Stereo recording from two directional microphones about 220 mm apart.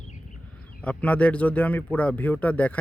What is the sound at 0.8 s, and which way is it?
Speech, 5° left (ahead or behind).